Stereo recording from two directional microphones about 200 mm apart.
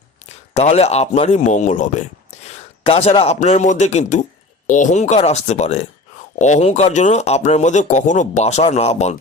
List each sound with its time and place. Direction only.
0.5 s speech: 30° left (ahead or behind)